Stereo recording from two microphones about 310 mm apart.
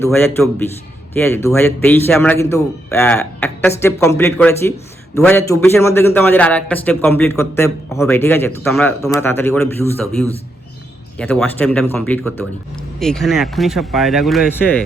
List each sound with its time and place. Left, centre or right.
0.0 s a man's voice: centre
11.2 s speech: centre